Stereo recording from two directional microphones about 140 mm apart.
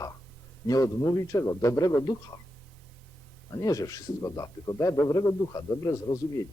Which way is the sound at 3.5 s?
25° left (ahead or behind).